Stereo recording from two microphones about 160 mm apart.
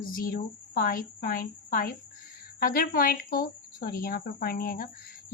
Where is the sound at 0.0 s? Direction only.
60° left (ahead or behind).